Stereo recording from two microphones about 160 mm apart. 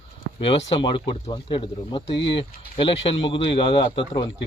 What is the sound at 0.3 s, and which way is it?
Speech, 30° left (ahead or behind).